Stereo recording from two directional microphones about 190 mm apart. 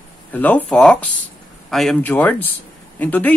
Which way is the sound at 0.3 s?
10° left (ahead or behind).